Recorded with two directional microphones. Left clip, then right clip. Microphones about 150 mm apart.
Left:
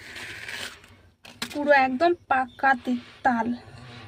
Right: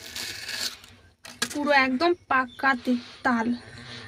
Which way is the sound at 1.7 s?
15° left (ahead or behind).